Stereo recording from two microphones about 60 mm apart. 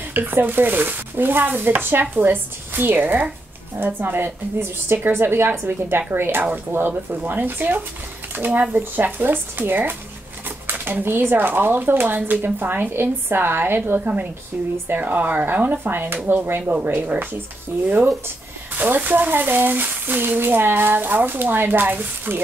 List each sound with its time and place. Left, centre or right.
0.1 s speech: right